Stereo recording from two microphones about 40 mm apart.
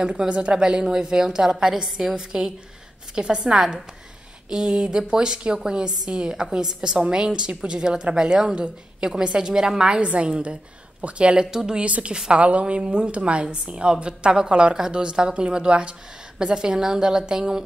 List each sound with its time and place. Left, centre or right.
0.0 s a woman's voice: centre
11.3 s a woman's voice: centre
11.8 s a woman's voice: right